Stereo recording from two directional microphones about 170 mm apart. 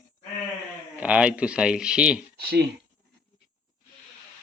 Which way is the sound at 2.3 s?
65° right (ahead or behind).